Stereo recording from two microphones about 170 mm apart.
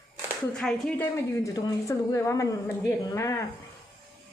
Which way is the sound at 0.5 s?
5° left (ahead or behind).